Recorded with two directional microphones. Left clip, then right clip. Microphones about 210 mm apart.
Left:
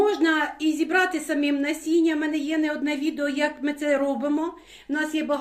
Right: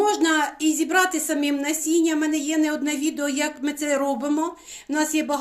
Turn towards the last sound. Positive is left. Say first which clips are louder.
# right 2 dB
turn(degrees=-30)  # may be behind; listen again after turning